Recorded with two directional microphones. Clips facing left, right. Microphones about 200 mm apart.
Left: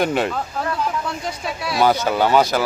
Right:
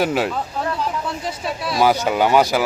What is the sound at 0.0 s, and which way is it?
Speech, 5° right (ahead or behind).